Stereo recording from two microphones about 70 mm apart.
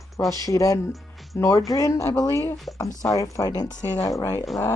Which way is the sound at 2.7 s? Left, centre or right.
Left.